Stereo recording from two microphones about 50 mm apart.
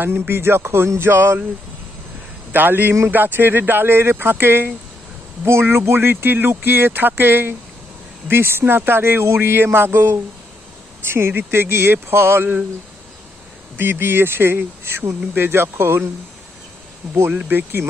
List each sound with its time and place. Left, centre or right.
0.3 s speech: right
2.5 s speech: right
13.7 s speech: right
17.5 s speech: right